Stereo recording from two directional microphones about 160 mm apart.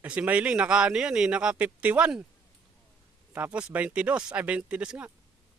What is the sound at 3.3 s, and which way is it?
A man's voice, 10° right (ahead or behind).